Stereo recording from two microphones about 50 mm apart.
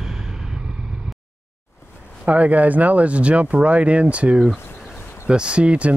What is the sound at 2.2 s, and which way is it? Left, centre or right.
Speech, right.